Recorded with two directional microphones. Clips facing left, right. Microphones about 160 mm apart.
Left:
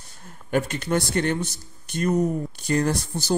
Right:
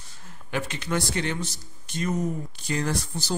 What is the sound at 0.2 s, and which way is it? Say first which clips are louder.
Speech: left 7 dB; 50° left (ahead or behind).